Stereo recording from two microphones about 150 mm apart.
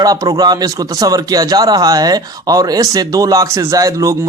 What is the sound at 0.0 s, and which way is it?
Speech, 25° right (ahead or behind).